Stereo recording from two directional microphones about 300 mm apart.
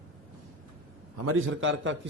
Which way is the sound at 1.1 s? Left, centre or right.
Right.